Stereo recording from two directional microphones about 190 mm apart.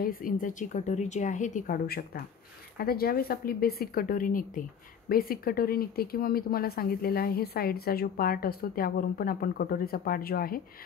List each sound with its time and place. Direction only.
0.0 s speech: 45° left (ahead or behind)